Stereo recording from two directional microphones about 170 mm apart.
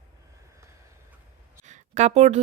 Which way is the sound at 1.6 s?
45° right (ahead or behind).